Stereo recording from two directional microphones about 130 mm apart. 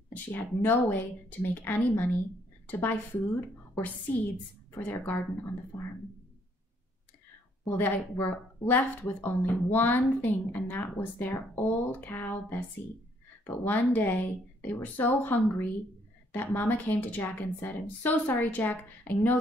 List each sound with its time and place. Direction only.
0.1 s speech: 15° left (ahead or behind)
7.6 s speech: 15° left (ahead or behind)
13.7 s speech: 15° left (ahead or behind)